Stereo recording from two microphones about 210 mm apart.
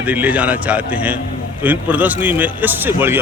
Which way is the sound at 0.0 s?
5° right (ahead or behind).